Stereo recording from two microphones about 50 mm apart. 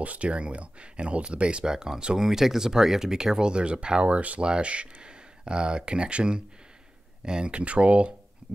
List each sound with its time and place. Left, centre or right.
0.0 s speech: right